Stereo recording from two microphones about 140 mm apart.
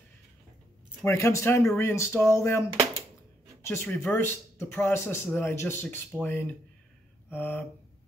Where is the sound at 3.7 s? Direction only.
15° left (ahead or behind).